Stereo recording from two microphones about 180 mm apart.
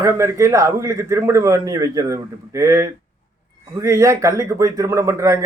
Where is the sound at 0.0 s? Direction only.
15° right (ahead or behind).